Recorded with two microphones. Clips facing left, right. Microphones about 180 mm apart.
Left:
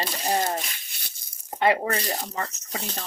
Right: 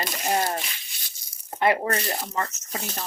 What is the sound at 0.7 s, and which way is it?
Rattle, 55° left (ahead or behind).